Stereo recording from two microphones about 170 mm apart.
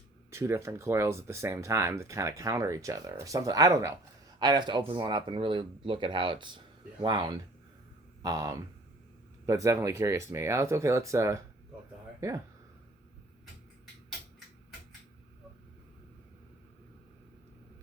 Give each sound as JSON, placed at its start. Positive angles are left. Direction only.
{"t": 0.3, "sound": "speech", "side_deg": -15}